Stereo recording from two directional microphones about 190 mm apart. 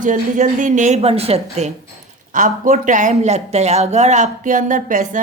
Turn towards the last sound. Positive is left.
turn(degrees=-45)  # may be behind; listen again after turning